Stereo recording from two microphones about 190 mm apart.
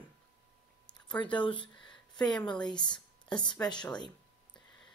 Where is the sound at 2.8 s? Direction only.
25° left (ahead or behind).